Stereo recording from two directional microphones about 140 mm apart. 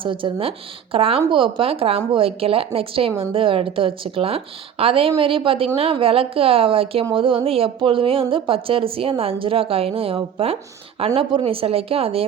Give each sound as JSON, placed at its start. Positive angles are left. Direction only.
{"t": 0.0, "sound": "a woman's voice", "side_deg": -35}